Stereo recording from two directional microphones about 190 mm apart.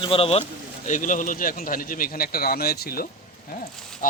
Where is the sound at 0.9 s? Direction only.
40° left (ahead or behind).